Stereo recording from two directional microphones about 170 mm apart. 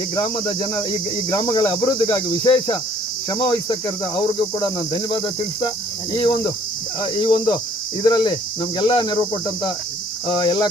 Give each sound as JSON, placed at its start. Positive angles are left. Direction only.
{"t": 0.2, "sound": "cricket", "side_deg": 25}
{"t": 10.2, "sound": "cricket", "side_deg": 25}